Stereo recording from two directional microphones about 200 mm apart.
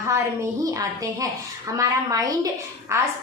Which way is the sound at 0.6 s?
15° right (ahead or behind).